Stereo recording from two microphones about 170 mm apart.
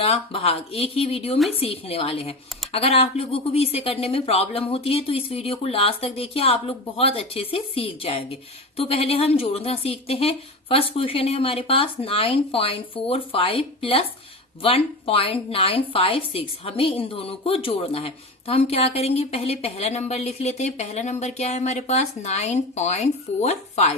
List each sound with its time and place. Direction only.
0.0 s a woman's voice: 35° left (ahead or behind)